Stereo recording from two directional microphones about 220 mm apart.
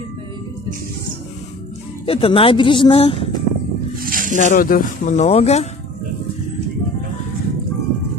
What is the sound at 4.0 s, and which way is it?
Snake, 40° right (ahead or behind).